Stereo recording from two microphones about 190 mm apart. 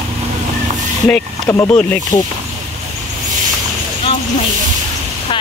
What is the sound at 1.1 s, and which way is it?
Speech, 10° left (ahead or behind).